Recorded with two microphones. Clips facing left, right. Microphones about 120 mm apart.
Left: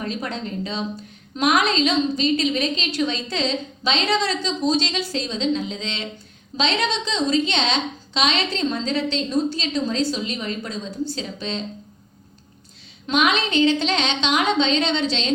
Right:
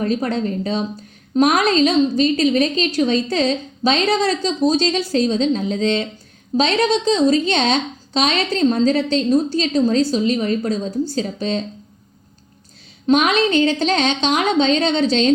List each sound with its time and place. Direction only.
0.0 s a woman's voice: 45° right (ahead or behind)
13.1 s a woman's voice: 40° right (ahead or behind)